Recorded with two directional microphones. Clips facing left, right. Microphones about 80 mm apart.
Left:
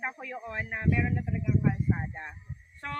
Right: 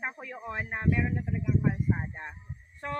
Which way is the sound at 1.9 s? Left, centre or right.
Centre.